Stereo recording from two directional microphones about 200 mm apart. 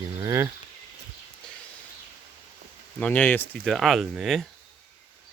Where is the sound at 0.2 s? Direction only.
15° right (ahead or behind).